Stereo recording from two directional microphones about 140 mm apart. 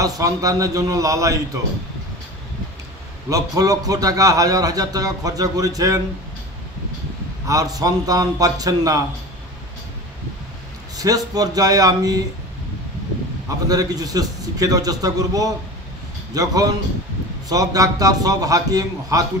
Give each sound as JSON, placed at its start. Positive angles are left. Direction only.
{"t": 0.2, "sound": "a man's voice", "side_deg": -25}
{"t": 3.3, "sound": "a man's voice", "side_deg": -25}
{"t": 7.4, "sound": "a man's voice", "side_deg": -25}
{"t": 11.0, "sound": "a man's voice", "side_deg": -25}
{"t": 13.7, "sound": "a man's voice", "side_deg": -25}